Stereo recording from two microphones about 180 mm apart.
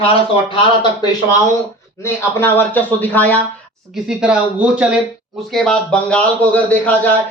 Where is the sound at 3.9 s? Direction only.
5° right (ahead or behind).